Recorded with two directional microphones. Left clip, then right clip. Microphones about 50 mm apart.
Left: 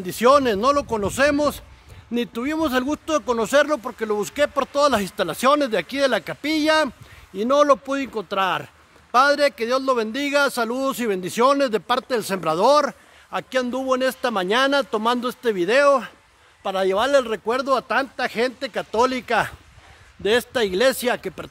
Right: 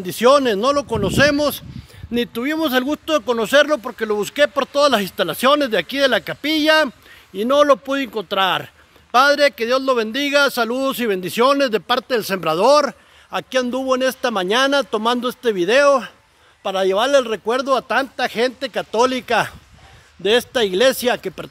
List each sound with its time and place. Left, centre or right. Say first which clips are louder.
0.0 s speech: right 2 dB; right; by 1.3 s centre
2.1 s a man's voice: right 3 dB; right
12.4 s speech: right 3 dB; right
13.3 s a man's voice: right 3 dB; right
14.9 s a man's voice: right 3 dB; right
15.5 s a man's voice: right 3 dB; right
16.6 s speech: right 3 dB; right
17.5 s a man's voice: right 3 dB; right